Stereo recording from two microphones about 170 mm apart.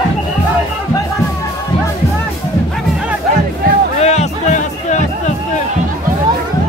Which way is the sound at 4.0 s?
40° left (ahead or behind).